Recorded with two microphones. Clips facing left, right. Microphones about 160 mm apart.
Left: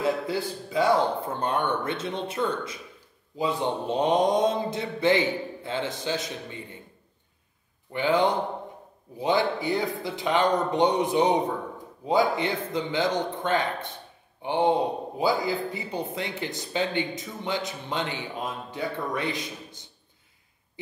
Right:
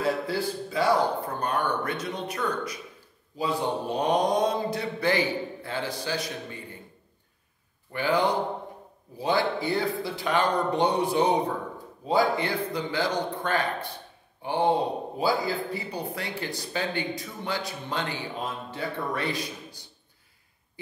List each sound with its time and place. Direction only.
0.0 s speech: 20° left (ahead or behind)
7.9 s speech: 20° left (ahead or behind)